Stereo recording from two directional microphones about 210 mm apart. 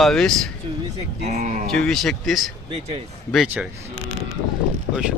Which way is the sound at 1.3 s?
35° right (ahead or behind).